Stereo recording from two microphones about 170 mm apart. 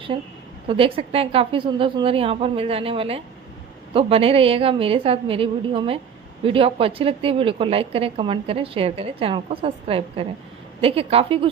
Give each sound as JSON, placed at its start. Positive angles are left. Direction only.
{"t": 0.7, "sound": "a woman's voice", "side_deg": -30}